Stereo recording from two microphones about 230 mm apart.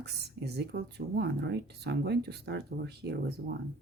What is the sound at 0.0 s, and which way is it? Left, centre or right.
Speech, right.